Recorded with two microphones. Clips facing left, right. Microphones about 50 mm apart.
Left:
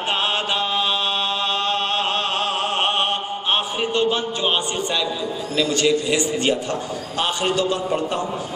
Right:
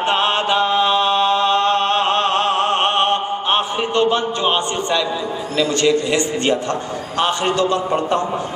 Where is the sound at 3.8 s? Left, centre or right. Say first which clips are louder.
Right 4 dB; right.